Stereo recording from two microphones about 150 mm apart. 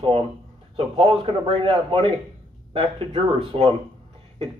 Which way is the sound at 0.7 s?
35° right (ahead or behind).